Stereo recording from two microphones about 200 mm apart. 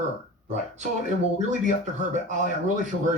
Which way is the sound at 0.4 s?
35° right (ahead or behind).